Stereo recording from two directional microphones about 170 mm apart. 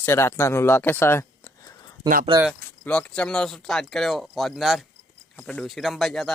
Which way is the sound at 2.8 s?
5° left (ahead or behind).